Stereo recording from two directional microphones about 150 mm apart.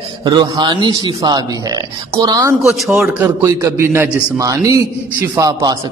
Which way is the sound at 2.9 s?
15° right (ahead or behind).